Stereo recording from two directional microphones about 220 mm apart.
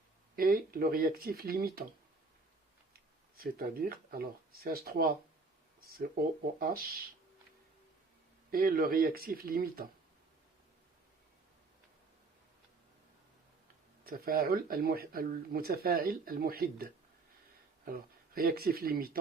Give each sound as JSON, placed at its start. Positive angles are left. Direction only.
{"t": 0.3, "sound": "speech", "side_deg": -40}
{"t": 3.3, "sound": "speech", "side_deg": -40}
{"t": 6.6, "sound": "speech", "side_deg": -40}
{"t": 8.4, "sound": "speech", "side_deg": -40}
{"t": 14.0, "sound": "speech", "side_deg": -40}